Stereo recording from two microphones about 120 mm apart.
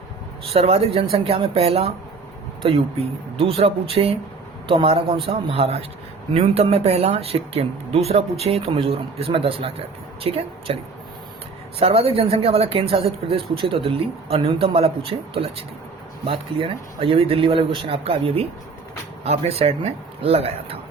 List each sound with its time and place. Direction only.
0.5 s speech: 55° right (ahead or behind)
11.8 s speech: 55° right (ahead or behind)